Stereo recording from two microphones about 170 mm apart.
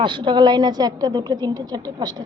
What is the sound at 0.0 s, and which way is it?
A woman's voice, 30° right (ahead or behind).